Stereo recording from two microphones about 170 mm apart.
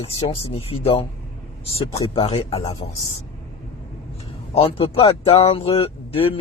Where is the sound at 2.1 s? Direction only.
35° left (ahead or behind).